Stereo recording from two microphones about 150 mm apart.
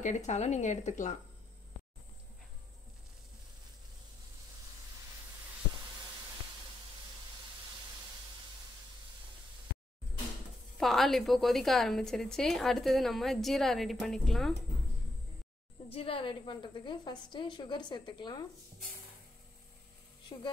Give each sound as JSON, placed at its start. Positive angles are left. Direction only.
{"t": 0.0, "sound": "speech", "side_deg": 50}
{"t": 10.8, "sound": "a woman's voice", "side_deg": 0}
{"t": 15.9, "sound": "a woman's voice", "side_deg": 40}